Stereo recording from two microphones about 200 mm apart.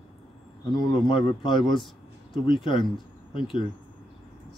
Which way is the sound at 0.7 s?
25° left (ahead or behind).